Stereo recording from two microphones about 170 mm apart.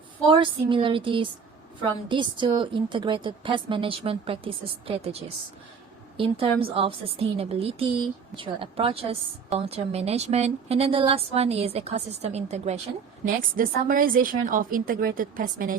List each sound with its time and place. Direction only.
0.3 s a woman's voice: 30° right (ahead or behind)
13.2 s a woman's voice: 55° right (ahead or behind)